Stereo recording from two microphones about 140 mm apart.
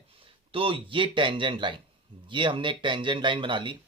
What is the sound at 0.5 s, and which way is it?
Speech, 40° right (ahead or behind).